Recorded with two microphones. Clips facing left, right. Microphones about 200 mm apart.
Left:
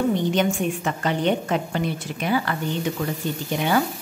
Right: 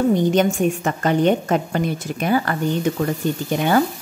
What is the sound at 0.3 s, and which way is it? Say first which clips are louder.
A woman's voice: right 4 dB; 45° right (ahead or behind).